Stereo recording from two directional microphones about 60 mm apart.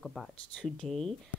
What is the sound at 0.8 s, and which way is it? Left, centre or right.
Speech, centre.